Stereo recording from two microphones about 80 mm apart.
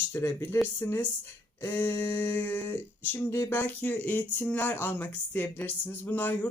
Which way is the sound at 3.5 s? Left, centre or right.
Left.